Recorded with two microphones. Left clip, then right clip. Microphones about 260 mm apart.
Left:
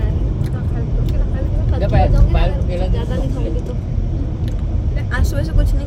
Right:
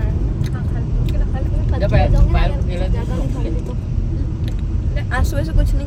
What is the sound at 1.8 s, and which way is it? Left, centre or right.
Speech, right.